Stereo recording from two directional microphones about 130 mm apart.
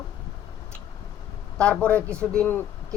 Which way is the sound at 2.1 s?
20° right (ahead or behind).